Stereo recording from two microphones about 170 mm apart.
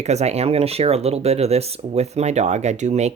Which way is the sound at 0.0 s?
40° right (ahead or behind).